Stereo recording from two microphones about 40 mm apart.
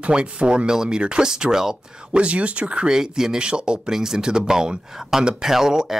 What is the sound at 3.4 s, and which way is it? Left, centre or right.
Speech, right.